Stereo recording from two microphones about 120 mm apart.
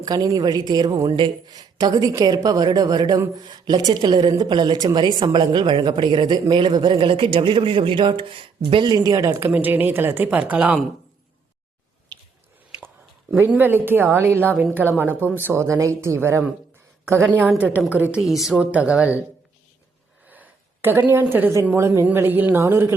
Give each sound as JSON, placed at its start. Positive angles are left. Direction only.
{"t": 0.0, "sound": "a woman's voice", "side_deg": -30}
{"t": 9.0, "sound": "a woman's voice", "side_deg": -25}
{"t": 13.3, "sound": "a woman's voice", "side_deg": -15}
{"t": 17.6, "sound": "a woman's voice", "side_deg": -10}
{"t": 20.2, "sound": "a sound", "side_deg": -15}
{"t": 21.1, "sound": "a woman's voice", "side_deg": -20}